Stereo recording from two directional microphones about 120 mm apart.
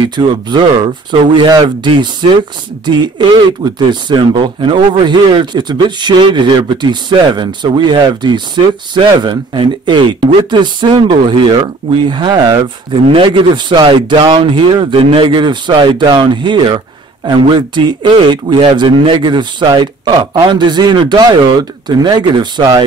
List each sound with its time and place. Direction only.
0.1 s speech: 40° right (ahead or behind)